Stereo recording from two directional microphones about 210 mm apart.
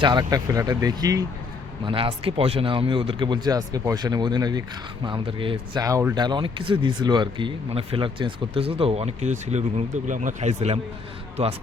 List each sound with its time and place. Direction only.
0.0 s speech: 20° right (ahead or behind)